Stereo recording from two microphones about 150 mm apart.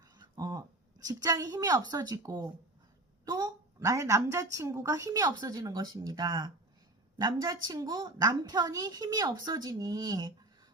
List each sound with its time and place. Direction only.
0.0 s a woman's voice: 25° right (ahead or behind)